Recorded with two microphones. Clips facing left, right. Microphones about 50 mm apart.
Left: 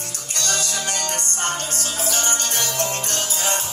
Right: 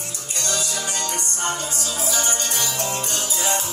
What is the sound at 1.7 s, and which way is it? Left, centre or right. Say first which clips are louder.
Music: even; left.